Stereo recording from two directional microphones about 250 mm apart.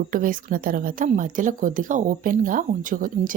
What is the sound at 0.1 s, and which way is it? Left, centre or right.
Speech, right.